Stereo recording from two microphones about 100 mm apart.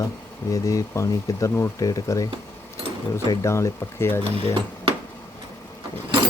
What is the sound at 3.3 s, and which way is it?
Speech, 30° left (ahead or behind).